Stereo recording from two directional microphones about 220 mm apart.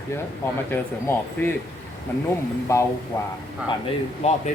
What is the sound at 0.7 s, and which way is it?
Speech, 10° left (ahead or behind).